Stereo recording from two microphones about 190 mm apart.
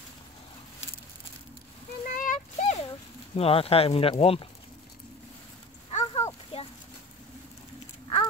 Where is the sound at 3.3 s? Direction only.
30° left (ahead or behind).